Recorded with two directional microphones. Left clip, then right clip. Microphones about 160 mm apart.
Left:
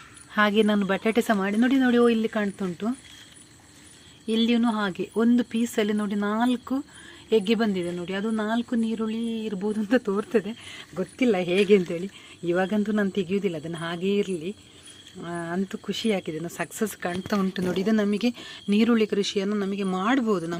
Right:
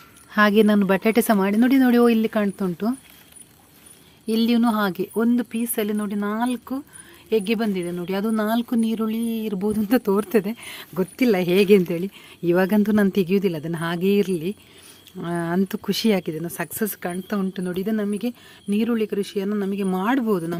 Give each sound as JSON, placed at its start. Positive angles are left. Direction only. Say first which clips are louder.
{"t": 0.3, "sound": "speech", "louder": "right 4 dB", "side_deg": -30}
{"t": 4.3, "sound": "speech", "louder": "right 3 dB", "side_deg": -35}
{"t": 5.1, "sound": "speech", "louder": "right 1 dB", "side_deg": -20}
{"t": 7.9, "sound": "speech", "louder": "right 4 dB", "side_deg": -40}
{"t": 16.3, "sound": "speech", "louder": "right 2 dB", "side_deg": -25}